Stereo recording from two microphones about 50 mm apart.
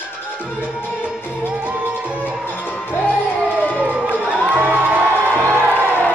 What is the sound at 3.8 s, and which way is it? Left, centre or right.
Crowd, right.